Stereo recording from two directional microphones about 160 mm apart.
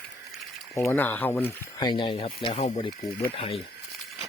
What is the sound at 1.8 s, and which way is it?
Speech, 30° left (ahead or behind).